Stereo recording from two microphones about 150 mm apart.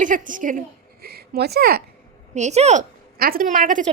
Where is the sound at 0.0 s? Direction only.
60° right (ahead or behind).